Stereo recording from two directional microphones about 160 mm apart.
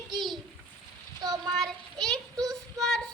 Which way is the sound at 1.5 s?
Centre (ahead or behind).